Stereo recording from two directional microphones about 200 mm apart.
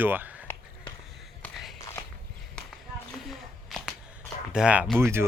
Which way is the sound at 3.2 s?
Centre (ahead or behind).